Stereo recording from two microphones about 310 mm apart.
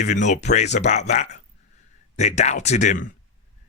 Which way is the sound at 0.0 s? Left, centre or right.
Left.